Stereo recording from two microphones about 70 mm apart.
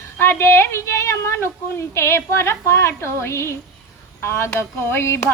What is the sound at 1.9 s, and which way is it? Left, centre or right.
A woman's voice, left.